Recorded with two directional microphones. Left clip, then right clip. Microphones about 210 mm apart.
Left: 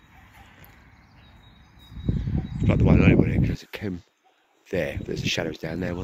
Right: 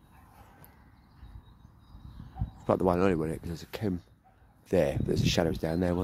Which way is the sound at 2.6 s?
25° right (ahead or behind).